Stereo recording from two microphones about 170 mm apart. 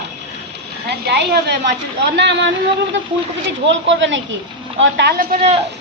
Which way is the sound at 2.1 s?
90° right.